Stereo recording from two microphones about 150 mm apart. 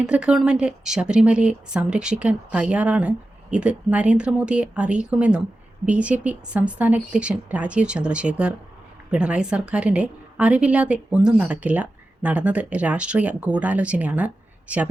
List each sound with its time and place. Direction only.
0.0 s a woman's voice: 5° right (ahead or behind)